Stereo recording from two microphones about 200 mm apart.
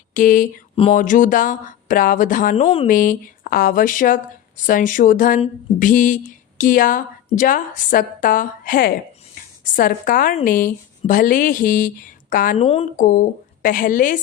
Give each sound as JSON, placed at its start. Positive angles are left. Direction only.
{"t": 0.1, "sound": "mantra", "side_deg": 40}
{"t": 0.9, "sound": "speech", "side_deg": 40}
{"t": 12.6, "sound": "speech", "side_deg": 30}
{"t": 13.1, "sound": "speech", "side_deg": 40}